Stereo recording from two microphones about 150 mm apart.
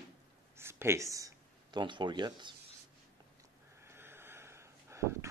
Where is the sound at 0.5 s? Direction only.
15° right (ahead or behind).